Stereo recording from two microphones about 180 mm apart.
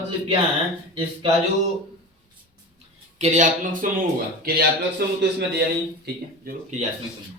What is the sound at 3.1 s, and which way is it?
Speech, 40° right (ahead or behind).